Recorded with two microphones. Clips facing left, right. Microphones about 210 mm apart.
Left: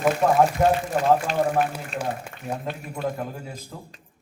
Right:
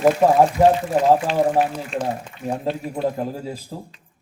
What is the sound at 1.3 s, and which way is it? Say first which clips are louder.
Speech: right 4 dB; 45° left (ahead or behind).